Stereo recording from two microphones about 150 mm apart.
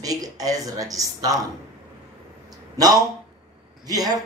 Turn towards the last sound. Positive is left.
turn(degrees=-25)  # may be behind; listen again after turning